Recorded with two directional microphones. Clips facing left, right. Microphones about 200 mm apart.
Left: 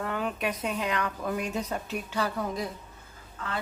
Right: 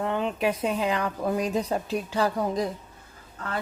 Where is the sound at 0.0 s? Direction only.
25° right (ahead or behind).